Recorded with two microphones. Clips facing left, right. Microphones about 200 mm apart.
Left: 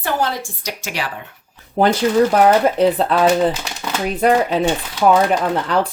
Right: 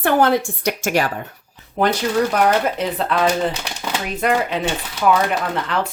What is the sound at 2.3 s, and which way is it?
Speech, 35° left (ahead or behind).